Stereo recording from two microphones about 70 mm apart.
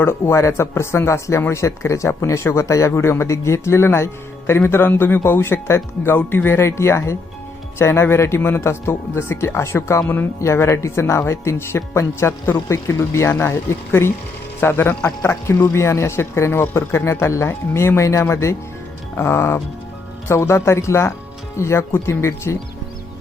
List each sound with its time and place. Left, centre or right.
0.0 s speech: left